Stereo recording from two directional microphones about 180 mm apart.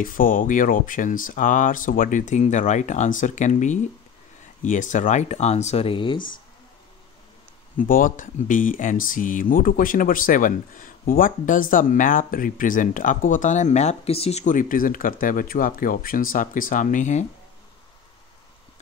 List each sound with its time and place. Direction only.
0.0 s speech: 50° left (ahead or behind); by 6.2 s 30° left (ahead or behind)
7.7 s speech: 50° left (ahead or behind)